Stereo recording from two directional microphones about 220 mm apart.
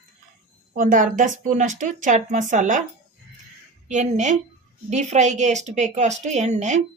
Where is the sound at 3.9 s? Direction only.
35° right (ahead or behind).